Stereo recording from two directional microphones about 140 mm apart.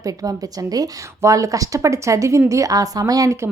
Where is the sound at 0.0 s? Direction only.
25° right (ahead or behind).